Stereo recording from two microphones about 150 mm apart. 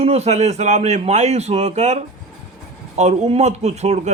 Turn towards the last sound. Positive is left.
turn(degrees=-50)  # may be behind; listen again after turning